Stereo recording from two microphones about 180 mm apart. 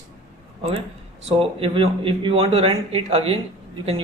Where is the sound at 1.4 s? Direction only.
30° right (ahead or behind).